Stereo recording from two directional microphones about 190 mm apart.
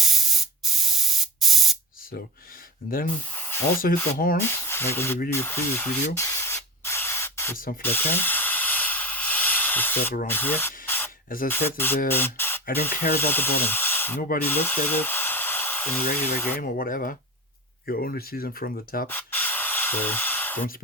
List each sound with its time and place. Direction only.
0.0 s spray: centre (ahead or behind)
3.3 s spray: 10° left (ahead or behind)
3.8 s speech: 55° left (ahead or behind)
4.4 s speech: 10° left (ahead or behind)
6.1 s spray: 15° left (ahead or behind)
7.5 s speech: 45° left (ahead or behind)
7.8 s hiss: 10° left (ahead or behind)
10.2 s speech: 10° left (ahead or behind)
14.4 s a sound: 10° left (ahead or behind)
16.1 s speech: 10° left (ahead or behind)
16.6 s speech: 45° left (ahead or behind)
19.0 s spray: 10° left (ahead or behind)